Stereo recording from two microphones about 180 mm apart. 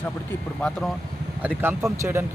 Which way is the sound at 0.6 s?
5° left (ahead or behind).